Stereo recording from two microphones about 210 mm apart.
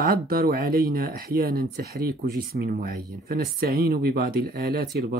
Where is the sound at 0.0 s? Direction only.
45° right (ahead or behind).